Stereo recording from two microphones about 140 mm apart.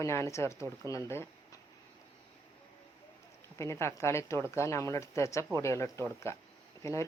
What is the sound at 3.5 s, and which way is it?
Speech, 20° left (ahead or behind).